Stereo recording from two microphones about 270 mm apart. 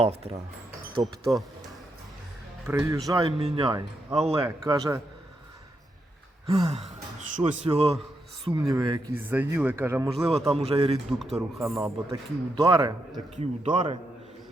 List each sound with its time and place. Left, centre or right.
0.0 s speech: right
1.0 s speech: centre
2.6 s a man's voice: centre
6.5 s a man's voice: right
10.3 s speech: right
11.2 s speech: centre
11.6 s a man's voice: centre